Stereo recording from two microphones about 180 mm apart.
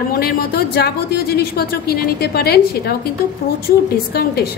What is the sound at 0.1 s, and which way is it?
Speech, 60° left (ahead or behind).